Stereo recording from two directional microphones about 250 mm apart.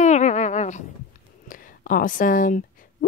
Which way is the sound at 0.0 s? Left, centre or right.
Left.